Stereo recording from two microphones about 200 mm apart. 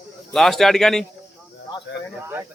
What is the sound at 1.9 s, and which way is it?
Speech, 65° left (ahead or behind).